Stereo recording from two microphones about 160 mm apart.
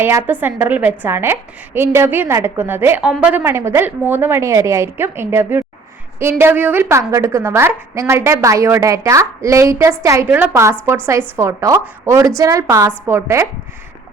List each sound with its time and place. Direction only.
0.0 s a woman's voice: 15° right (ahead or behind)